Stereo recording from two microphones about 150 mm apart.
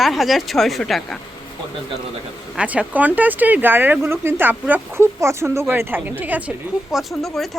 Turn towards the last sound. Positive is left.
turn(degrees=0)  # may be behind; listen again after turning